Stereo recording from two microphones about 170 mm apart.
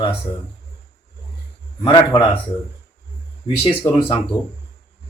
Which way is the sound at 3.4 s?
30° left (ahead or behind).